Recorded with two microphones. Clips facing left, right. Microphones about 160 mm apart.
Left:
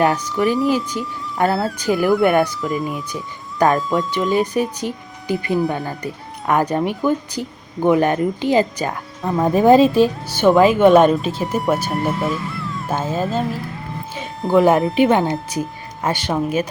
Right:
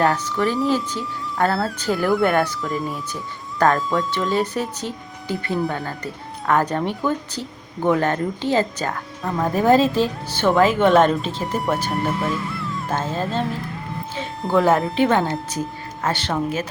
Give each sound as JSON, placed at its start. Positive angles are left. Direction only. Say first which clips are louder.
{"t": 0.0, "sound": "speech", "louder": "left 2 dB", "side_deg": 15}
{"t": 2.6, "sound": "speech", "louder": "left 3 dB", "side_deg": 0}
{"t": 3.9, "sound": "speech", "louder": "left 3 dB", "side_deg": 20}
{"t": 14.5, "sound": "speech", "louder": "left 4 dB", "side_deg": 15}